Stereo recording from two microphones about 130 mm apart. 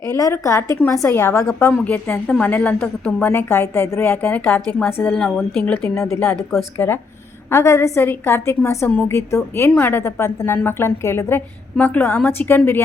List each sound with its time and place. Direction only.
0.2 s a woman's voice: 25° left (ahead or behind)